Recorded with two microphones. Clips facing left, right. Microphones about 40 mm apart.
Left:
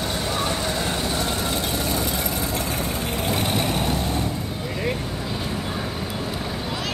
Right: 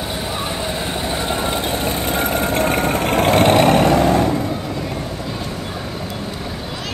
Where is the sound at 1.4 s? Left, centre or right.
Right.